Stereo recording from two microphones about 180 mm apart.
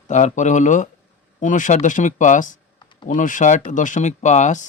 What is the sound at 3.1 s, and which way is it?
Speech, 45° left (ahead or behind).